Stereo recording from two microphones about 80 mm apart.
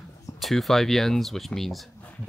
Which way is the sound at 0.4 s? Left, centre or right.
Centre.